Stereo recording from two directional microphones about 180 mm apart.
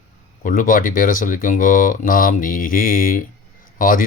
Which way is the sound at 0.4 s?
50° left (ahead or behind).